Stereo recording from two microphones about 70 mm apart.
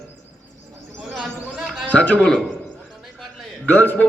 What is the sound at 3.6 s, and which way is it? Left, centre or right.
Speech, left.